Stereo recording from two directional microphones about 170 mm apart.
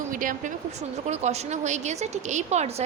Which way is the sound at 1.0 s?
40° right (ahead or behind).